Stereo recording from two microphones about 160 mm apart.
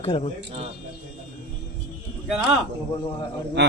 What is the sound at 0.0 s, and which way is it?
Speech, 40° left (ahead or behind).